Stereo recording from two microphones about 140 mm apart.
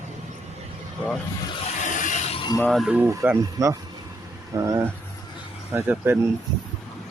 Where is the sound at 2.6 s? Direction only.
Centre (ahead or behind).